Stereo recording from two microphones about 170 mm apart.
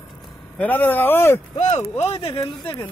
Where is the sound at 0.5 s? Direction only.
10° left (ahead or behind).